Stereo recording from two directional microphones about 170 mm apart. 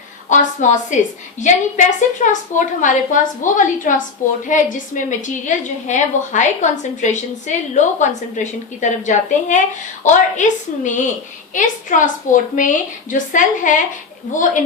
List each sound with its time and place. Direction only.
0.3 s a woman's voice: 45° left (ahead or behind)